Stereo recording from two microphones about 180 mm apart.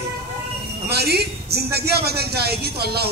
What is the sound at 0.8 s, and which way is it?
A man's voice, 65° right (ahead or behind).